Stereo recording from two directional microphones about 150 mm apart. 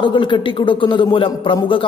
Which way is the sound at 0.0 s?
35° left (ahead or behind).